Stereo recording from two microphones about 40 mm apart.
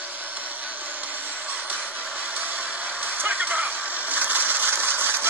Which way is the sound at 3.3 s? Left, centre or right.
Right.